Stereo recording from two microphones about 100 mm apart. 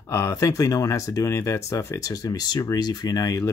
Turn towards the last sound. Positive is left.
turn(degrees=35)  # may be behind; listen again after turning